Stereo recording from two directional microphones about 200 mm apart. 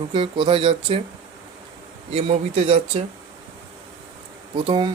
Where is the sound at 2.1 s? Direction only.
30° right (ahead or behind).